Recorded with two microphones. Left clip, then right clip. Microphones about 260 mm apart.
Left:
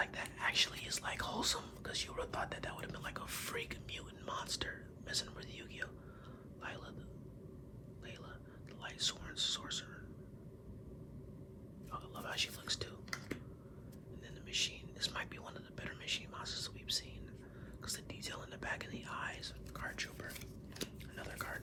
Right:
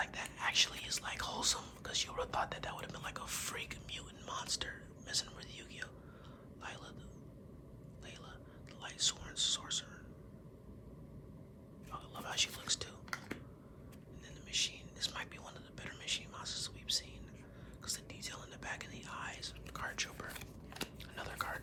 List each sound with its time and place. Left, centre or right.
0.0 s speech: centre
8.8 s speech: centre
11.9 s whispering: centre
13.1 s a sound: right
14.5 s whispering: centre